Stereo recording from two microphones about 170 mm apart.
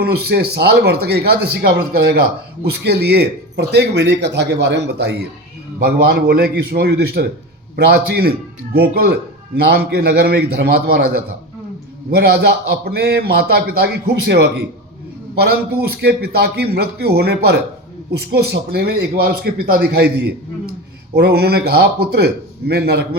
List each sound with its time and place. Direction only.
0.0 s a man's voice: 70° right (ahead or behind)
2.6 s speech: 75° right (ahead or behind)
5.8 s a man's voice: 70° right (ahead or behind)
15.9 s a man's voice: 70° right (ahead or behind)